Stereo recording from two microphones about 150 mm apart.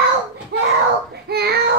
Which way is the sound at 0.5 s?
90° right.